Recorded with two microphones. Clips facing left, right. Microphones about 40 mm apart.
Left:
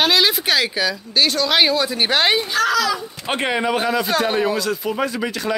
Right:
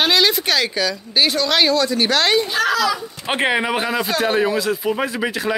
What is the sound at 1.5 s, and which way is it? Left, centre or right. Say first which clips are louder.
Speech: right 1 dB; centre.